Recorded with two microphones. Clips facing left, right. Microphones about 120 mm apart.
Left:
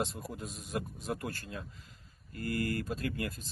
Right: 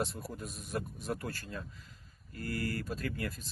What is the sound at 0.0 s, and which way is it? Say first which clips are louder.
Speech: left 1 dB; 20° left (ahead or behind).